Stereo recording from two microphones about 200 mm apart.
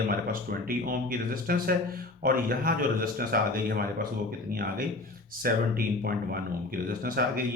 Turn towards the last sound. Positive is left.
turn(degrees=-45)  # may be behind; listen again after turning